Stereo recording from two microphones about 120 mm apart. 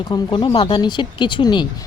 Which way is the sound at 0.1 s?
45° left (ahead or behind).